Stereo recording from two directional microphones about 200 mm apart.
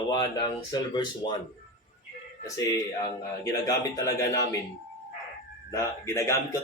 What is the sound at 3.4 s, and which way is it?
Speech, 15° left (ahead or behind).